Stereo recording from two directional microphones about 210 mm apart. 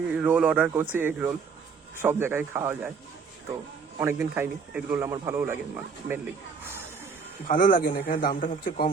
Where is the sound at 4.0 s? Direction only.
10° right (ahead or behind).